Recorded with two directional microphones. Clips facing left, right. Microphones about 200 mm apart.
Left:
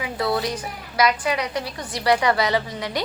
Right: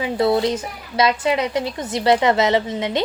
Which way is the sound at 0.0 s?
25° right (ahead or behind).